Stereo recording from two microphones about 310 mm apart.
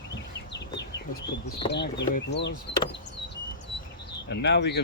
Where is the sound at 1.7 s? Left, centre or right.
Left.